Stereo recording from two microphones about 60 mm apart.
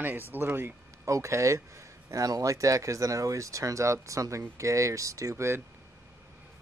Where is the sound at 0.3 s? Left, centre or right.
Right.